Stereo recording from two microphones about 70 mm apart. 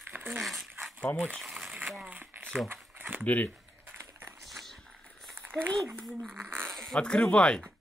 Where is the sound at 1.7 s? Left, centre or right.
Centre.